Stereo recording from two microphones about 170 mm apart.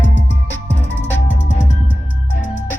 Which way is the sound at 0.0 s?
90° left.